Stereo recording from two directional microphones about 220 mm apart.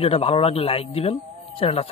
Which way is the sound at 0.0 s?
25° left (ahead or behind).